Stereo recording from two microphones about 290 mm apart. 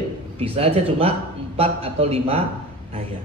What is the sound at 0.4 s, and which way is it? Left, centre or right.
A man's voice, centre.